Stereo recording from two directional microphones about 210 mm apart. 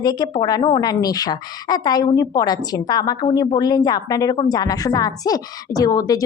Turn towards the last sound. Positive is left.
turn(degrees=15)  # may be behind; listen again after turning